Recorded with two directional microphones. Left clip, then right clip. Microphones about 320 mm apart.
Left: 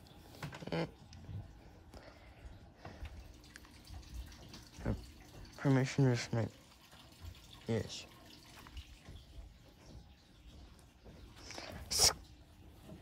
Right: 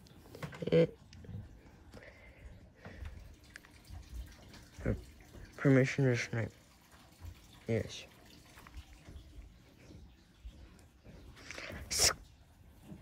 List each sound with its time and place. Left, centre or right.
0.3 s a sound: centre
4.3 s water tap: centre
5.5 s speech: centre
7.6 s speech: centre
11.4 s walk: centre